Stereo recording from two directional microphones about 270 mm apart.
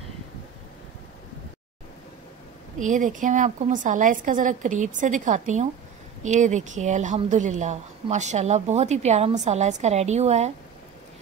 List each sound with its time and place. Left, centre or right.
2.8 s speech: right